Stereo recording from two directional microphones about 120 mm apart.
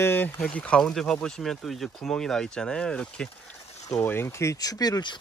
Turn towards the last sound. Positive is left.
turn(degrees=35)  # may be behind; listen again after turning